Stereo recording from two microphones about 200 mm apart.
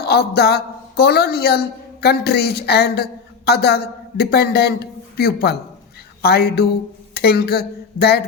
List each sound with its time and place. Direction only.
0.0 s a woman's voice: 55° left (ahead or behind)
6.2 s a sound: 50° left (ahead or behind)
7.1 s speech: 50° left (ahead or behind)